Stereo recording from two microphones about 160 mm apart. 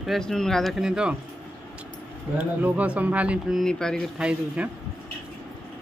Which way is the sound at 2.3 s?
10° right (ahead or behind).